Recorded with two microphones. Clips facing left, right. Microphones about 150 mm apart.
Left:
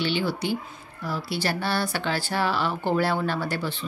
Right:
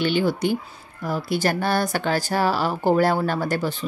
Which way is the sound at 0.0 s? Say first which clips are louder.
Right 5 dB; 45° right (ahead or behind).